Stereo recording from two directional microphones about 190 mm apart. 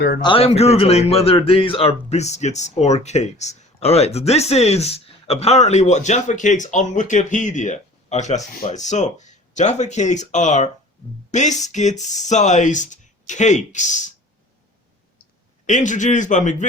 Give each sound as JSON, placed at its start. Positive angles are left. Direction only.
{"t": 0.2, "sound": "a man's voice", "side_deg": 30}
{"t": 15.6, "sound": "a man's voice", "side_deg": 40}